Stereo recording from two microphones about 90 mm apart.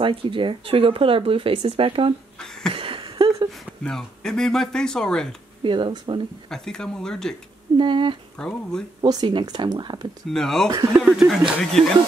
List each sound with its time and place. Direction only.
0.0 s speech: 85° right
2.3 s a sound: 5° left (ahead or behind)
2.7 s a sound: 80° right
3.8 s speech: 5° left (ahead or behind)
5.6 s speech: 65° right (ahead or behind)
6.5 s speech: 5° left (ahead or behind)
7.7 s speech: 60° right (ahead or behind)
8.4 s speech: 10° left (ahead or behind)
9.0 s speech: 50° right (ahead or behind)
10.3 s speech: 5° left (ahead or behind)